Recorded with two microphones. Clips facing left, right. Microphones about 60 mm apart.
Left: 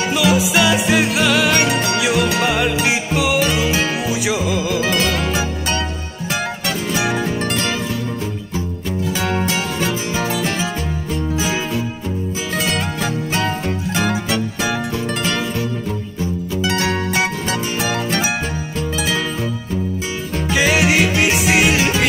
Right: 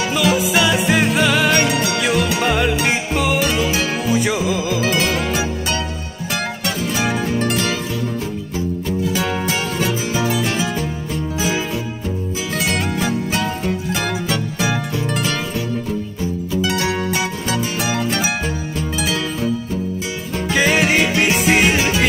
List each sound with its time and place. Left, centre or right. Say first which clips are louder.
0.1 s music: left 1 dB; centre
7.4 s music: right 1 dB; left
9.2 s music: left 1 dB; centre
9.8 s music: right 1 dB; left
13.0 s music: even; left
14.0 s music: left 4 dB; centre
17.1 s music: left 1 dB; left
20.4 s music: even; centre